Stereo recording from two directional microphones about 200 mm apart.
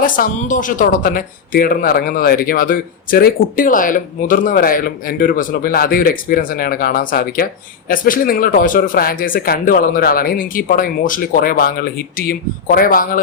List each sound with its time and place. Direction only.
0.0 s speech: 40° left (ahead or behind)